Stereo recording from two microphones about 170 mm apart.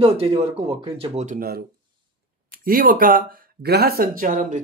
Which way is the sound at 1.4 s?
65° right (ahead or behind).